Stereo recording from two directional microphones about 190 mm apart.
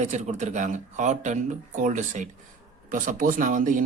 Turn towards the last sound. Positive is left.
turn(degrees=-45)  # may be behind; listen again after turning